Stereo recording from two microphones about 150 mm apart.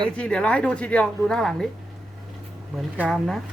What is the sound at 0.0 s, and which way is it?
Speech, 5° left (ahead or behind).